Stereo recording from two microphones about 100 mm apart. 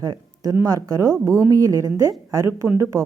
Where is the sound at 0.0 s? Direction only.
40° right (ahead or behind).